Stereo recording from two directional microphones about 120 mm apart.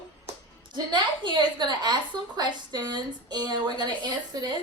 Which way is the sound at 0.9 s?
40° right (ahead or behind).